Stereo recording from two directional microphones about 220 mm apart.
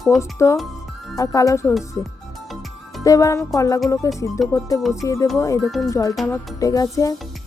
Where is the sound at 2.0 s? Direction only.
Centre (ahead or behind).